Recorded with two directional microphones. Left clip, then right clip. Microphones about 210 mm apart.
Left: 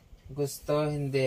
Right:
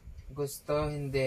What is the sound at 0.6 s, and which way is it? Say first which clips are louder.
Speech: left 3 dB; 40° left (ahead or behind).